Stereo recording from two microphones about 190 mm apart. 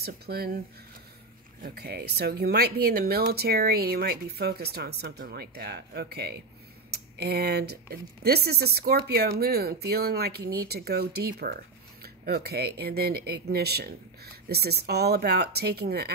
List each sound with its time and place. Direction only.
0.0 s speech: 55° right (ahead or behind)
1.6 s speech: 55° right (ahead or behind)